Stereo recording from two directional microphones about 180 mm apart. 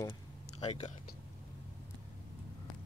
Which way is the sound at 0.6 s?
35° left (ahead or behind).